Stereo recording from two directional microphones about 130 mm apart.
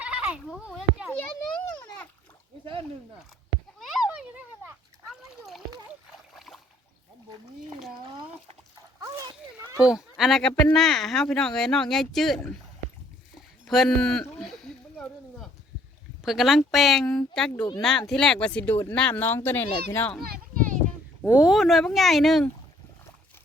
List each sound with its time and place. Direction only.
0.0 s bleat: 5° right (ahead or behind)
0.6 s speech: 5° right (ahead or behind)
1.1 s children playing: 15° left (ahead or behind)
3.8 s a sound: centre (ahead or behind)
5.1 s speech: centre (ahead or behind)
6.3 s boat: centre (ahead or behind)
9.0 s a child's voice: 30° right (ahead or behind)
9.8 s speech: 5° right (ahead or behind)
13.7 s speech: 5° left (ahead or behind)
16.2 s speech: centre (ahead or behind); by 20.1 s 15° left (ahead or behind)
21.2 s speech: 5° right (ahead or behind)